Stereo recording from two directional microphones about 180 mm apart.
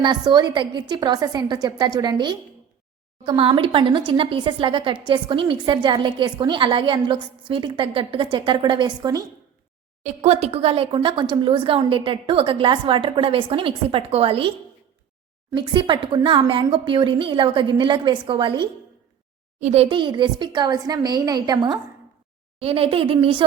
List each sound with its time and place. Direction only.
0.0 s a woman's voice: 25° right (ahead or behind)
10.0 s speech: 40° right (ahead or behind)
15.5 s a woman's voice: 25° right (ahead or behind)
19.5 s a woman's voice: 35° right (ahead or behind)